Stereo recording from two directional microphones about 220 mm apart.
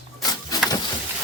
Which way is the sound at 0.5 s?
15° left (ahead or behind).